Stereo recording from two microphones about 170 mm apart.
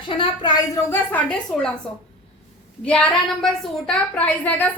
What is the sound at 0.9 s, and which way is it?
Speech, 10° left (ahead or behind).